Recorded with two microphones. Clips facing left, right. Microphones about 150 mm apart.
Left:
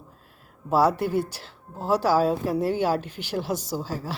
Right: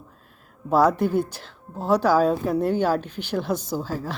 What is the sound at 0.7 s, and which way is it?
Speech, 10° left (ahead or behind).